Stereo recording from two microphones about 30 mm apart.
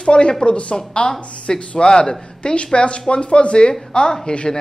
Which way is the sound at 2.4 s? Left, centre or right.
Left.